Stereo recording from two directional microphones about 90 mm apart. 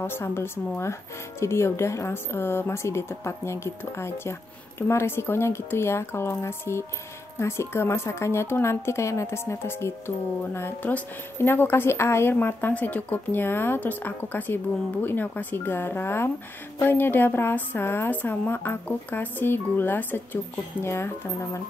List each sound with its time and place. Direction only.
0.0 s speech: 25° left (ahead or behind)